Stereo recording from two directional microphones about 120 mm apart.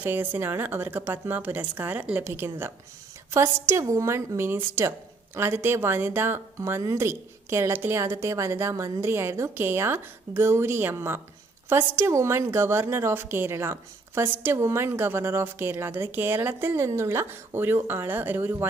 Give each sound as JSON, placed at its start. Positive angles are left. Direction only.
{"t": 0.0, "sound": "a woman's voice", "side_deg": -15}